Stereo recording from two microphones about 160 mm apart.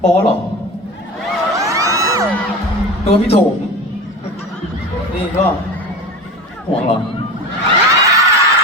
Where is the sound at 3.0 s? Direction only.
40° left (ahead or behind).